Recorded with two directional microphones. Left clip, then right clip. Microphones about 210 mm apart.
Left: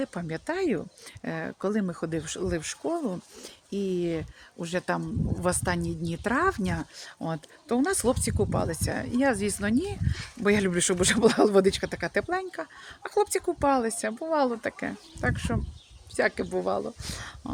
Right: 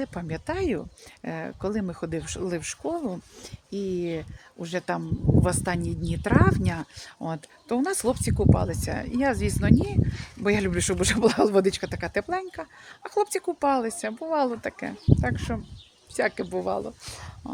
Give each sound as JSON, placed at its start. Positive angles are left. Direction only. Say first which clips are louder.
{"t": 0.0, "sound": "speech", "louder": "even", "side_deg": 0}